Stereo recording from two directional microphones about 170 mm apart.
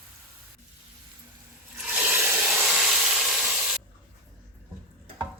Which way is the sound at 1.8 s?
10° right (ahead or behind).